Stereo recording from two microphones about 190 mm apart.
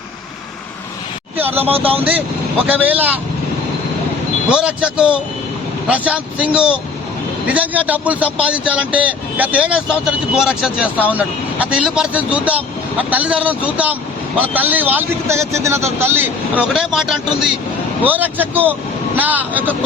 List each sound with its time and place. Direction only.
1.4 s speech: 10° right (ahead or behind)
1.7 s speech: 30° right (ahead or behind)
2.8 s speech: 10° right (ahead or behind)
4.4 s speech: 5° right (ahead or behind)